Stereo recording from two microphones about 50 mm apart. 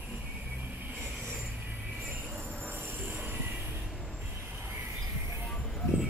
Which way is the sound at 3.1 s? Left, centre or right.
Right.